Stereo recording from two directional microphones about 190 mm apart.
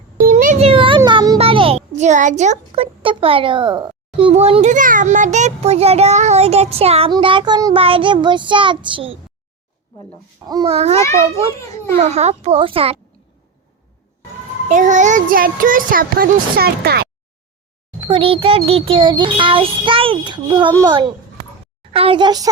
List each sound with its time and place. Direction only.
0.3 s a sound: 45° right (ahead or behind); by 1.8 s 30° right (ahead or behind)
2.0 s speech: 40° right (ahead or behind)
7.1 s child singing: 25° right (ahead or behind)
10.4 s child singing: 20° right (ahead or behind)
10.7 s speech: 35° right (ahead or behind)
12.0 s speech: 35° right (ahead or behind)
14.7 s speech: 40° right (ahead or behind); by 17.1 s 55° right (ahead or behind)
18.1 s child singing: 30° right (ahead or behind)